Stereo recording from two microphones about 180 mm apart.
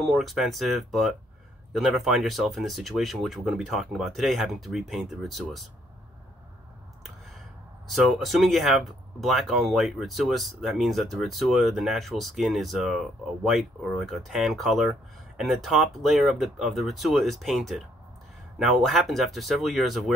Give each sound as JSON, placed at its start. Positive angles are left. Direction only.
{"t": 0.0, "sound": "speech", "side_deg": 0}
{"t": 7.9, "sound": "speech", "side_deg": 0}